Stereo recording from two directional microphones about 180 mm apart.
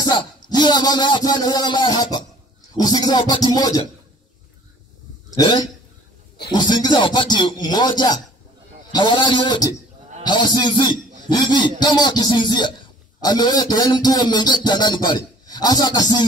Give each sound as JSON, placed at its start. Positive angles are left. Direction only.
{"t": 0.0, "sound": "music", "side_deg": 25}
{"t": 5.4, "sound": "music", "side_deg": 25}
{"t": 10.2, "sound": "a man's voice", "side_deg": 25}
{"t": 11.8, "sound": "music", "side_deg": 25}